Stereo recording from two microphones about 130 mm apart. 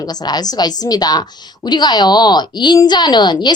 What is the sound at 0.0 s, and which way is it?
A woman's voice, 30° left (ahead or behind).